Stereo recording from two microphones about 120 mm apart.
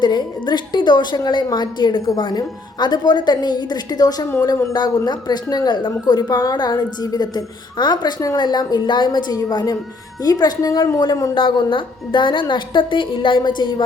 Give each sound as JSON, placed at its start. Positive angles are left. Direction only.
{"t": 0.0, "sound": "a woman's voice", "side_deg": 40}